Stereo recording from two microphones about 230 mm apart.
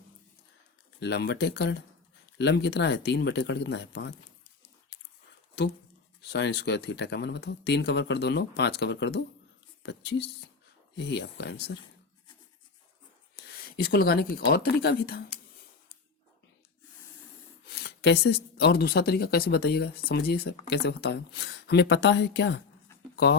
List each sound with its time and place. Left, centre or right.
0.9 s speech: left
6.2 s speech: left
13.3 s speech: left
17.7 s speech: left